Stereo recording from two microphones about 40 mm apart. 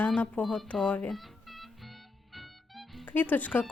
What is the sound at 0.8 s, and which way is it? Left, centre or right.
Speech, left.